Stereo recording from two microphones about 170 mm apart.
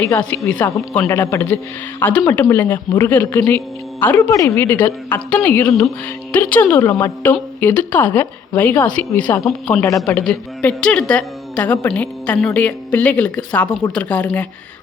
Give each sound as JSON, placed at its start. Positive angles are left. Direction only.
{"t": 0.0, "sound": "a woman's voice", "side_deg": 10}
{"t": 10.2, "sound": "a woman's voice", "side_deg": 5}